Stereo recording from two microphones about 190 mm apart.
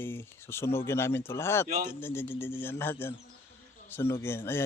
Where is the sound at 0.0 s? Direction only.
10° left (ahead or behind).